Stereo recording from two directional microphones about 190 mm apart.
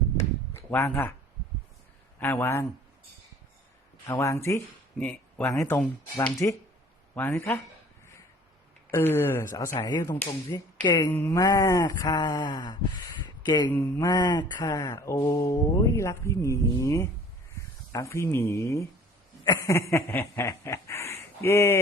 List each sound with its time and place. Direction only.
0.7 s mantra: 10° left (ahead or behind)
2.1 s mantra: 10° left (ahead or behind)
4.0 s mantra: 15° left (ahead or behind)
8.9 s mantra: 10° left (ahead or behind)
10.5 s a sound: 20° left (ahead or behind)
13.7 s mantra: 15° left (ahead or behind)
19.5 s snicker: 15° left (ahead or behind)